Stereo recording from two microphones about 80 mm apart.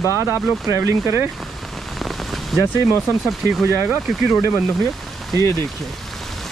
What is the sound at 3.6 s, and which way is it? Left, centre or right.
Speech, right.